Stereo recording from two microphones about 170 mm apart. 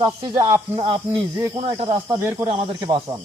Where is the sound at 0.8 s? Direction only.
30° right (ahead or behind).